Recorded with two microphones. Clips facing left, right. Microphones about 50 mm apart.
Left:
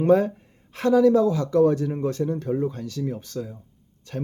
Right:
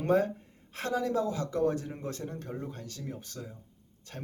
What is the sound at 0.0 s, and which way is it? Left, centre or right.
Speech, left.